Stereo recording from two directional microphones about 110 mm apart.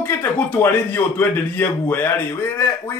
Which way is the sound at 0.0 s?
20° left (ahead or behind).